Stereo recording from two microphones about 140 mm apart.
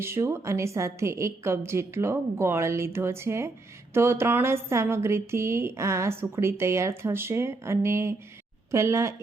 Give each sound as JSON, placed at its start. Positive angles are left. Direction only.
{"t": 0.0, "sound": "a woman's voice", "side_deg": -20}